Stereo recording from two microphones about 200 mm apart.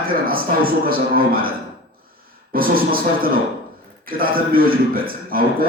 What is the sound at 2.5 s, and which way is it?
A man's voice, 45° right (ahead or behind).